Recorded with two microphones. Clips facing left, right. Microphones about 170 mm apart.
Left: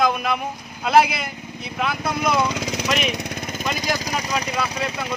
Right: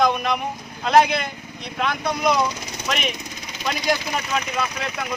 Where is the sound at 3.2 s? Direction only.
45° left (ahead or behind).